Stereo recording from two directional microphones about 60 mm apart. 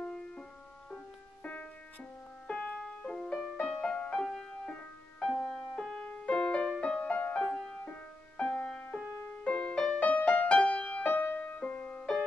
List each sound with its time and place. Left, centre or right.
0.1 s music: centre
7.4 s music: centre; by 11.6 s left
11.6 s music: centre